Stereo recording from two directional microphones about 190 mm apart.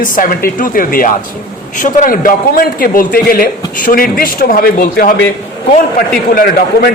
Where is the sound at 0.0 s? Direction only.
45° left (ahead or behind).